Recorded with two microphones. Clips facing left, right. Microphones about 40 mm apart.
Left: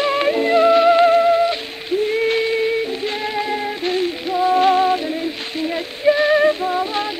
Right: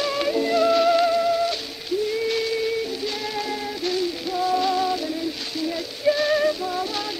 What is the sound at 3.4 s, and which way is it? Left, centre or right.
Music, left.